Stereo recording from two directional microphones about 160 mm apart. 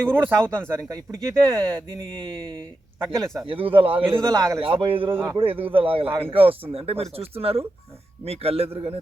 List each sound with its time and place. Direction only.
0.0 s speech: 15° right (ahead or behind)
0.5 s speech: 5° left (ahead or behind)
0.8 s speech: 20° right (ahead or behind)
1.2 s speech: 5° left (ahead or behind)
3.4 s speech: 35° right (ahead or behind)
4.4 s speech: 20° right (ahead or behind)
4.6 s speech: 35° right (ahead or behind)
5.1 s speech: 20° right (ahead or behind)
5.4 s speech: 35° right (ahead or behind)